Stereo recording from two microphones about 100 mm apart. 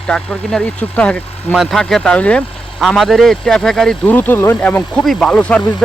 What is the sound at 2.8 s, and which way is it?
Speech, centre (ahead or behind).